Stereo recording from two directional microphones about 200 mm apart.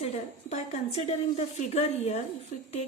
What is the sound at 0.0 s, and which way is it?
A woman's voice, 30° left (ahead or behind).